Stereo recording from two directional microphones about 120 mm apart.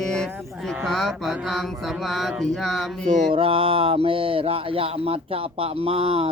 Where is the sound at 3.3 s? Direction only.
50° right (ahead or behind).